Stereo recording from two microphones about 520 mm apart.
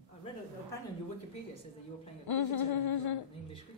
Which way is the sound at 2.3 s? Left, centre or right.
Left.